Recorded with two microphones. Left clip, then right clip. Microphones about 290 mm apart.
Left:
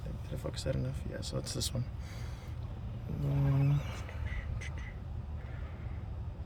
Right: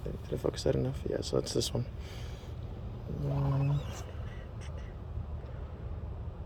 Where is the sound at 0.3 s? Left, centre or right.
Centre.